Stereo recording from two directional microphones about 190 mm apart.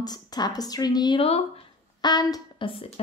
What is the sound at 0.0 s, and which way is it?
Speech, 20° left (ahead or behind).